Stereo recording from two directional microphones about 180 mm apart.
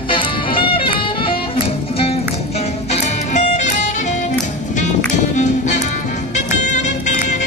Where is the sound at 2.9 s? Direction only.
40° left (ahead or behind).